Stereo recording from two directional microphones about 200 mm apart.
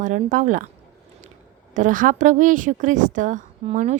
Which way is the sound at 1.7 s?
40° right (ahead or behind).